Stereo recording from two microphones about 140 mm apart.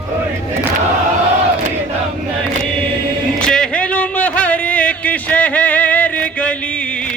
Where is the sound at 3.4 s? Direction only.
5° left (ahead or behind).